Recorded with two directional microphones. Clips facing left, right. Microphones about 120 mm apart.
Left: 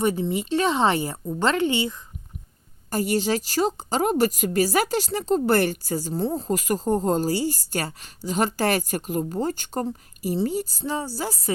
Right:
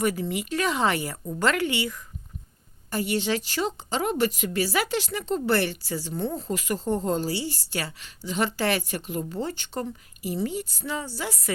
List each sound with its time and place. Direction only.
0.0 s speech: 25° left (ahead or behind)
2.9 s a woman's voice: 40° left (ahead or behind)